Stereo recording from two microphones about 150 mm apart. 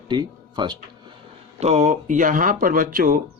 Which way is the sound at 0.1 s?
30° right (ahead or behind).